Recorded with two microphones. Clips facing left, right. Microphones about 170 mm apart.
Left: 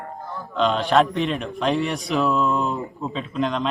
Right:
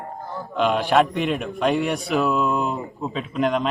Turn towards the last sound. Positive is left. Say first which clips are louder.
# right 2 dB
turn(degrees=0)  # may be behind; listen again after turning